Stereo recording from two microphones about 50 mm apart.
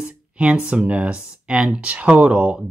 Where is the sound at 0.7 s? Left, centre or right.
Right.